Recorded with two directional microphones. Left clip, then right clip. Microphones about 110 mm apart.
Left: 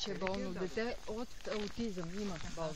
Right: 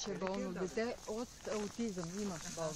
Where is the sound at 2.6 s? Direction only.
50° left (ahead or behind).